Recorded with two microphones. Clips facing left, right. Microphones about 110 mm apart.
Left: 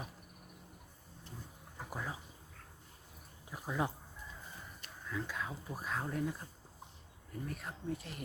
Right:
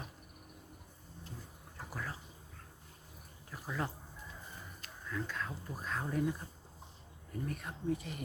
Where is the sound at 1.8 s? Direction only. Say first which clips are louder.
Left 1 dB; 15° left (ahead or behind).